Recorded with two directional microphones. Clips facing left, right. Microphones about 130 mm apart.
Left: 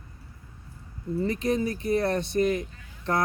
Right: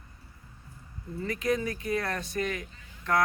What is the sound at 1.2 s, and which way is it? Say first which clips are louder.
Speech: left 3 dB; 30° left (ahead or behind).